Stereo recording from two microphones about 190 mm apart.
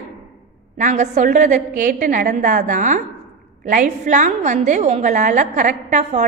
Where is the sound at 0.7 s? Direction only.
40° right (ahead or behind).